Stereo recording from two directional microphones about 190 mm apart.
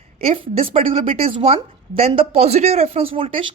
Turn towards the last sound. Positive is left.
turn(degrees=-30)  # may be behind; listen again after turning